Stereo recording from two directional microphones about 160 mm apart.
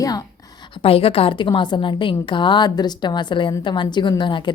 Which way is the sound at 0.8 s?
35° left (ahead or behind).